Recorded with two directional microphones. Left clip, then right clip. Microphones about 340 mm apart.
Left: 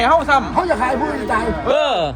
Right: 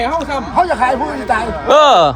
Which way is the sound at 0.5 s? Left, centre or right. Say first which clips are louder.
Right 4 dB; centre.